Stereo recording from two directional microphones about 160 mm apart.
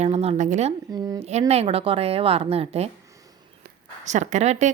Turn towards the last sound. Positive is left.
turn(degrees=-45)  # may be behind; listen again after turning